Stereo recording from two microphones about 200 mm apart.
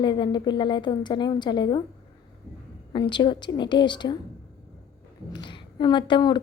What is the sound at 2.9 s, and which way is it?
A woman's voice, 25° left (ahead or behind).